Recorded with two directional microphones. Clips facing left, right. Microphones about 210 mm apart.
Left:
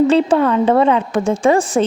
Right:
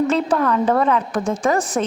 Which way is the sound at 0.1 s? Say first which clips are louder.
Left 5 dB; 30° left (ahead or behind).